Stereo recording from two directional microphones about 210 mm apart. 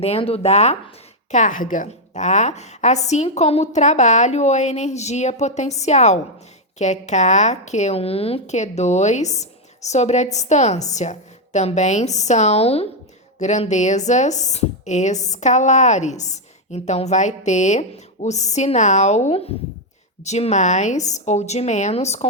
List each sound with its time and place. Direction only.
0.0 s a woman's voice: 30° left (ahead or behind)